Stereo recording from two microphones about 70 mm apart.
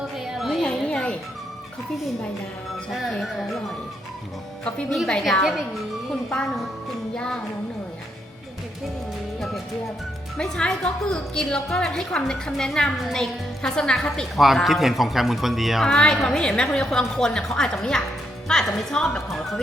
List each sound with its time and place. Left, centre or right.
0.3 s music: centre
0.6 s music: centre
2.9 s a man's voice: centre
4.6 s a woman's voice: centre
5.3 s a man's voice: centre
10.3 s a woman's voice: centre
14.3 s a man's voice: centre
15.9 s a woman's voice: centre